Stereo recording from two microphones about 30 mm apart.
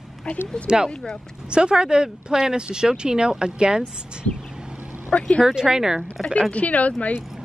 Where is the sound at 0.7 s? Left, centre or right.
Right.